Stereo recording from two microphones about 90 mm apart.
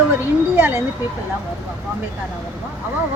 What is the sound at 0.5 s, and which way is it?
Speech, 25° right (ahead or behind).